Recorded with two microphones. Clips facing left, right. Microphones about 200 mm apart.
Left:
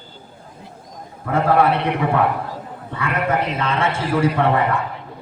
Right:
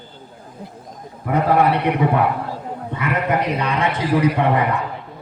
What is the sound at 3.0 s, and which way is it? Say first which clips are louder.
A man's voice: even; 20° right (ahead or behind).